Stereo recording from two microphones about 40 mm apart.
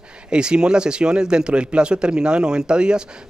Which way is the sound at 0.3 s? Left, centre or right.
Right.